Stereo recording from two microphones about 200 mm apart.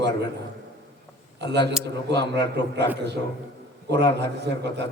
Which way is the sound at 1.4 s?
60° right (ahead or behind).